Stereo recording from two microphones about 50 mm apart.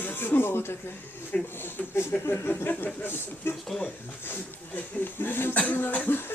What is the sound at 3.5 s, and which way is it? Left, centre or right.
Speech, centre.